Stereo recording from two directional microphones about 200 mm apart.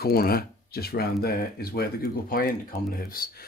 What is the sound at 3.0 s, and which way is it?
Speech, 45° left (ahead or behind).